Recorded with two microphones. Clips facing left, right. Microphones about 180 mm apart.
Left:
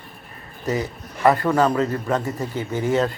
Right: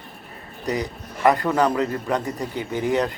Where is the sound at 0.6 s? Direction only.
15° right (ahead or behind).